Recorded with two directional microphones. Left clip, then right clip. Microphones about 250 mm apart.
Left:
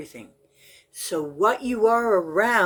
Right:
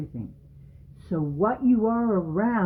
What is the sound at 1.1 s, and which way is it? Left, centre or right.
Speech, centre.